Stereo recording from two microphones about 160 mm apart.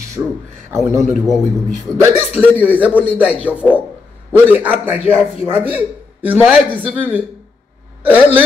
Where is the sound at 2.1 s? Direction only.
40° left (ahead or behind).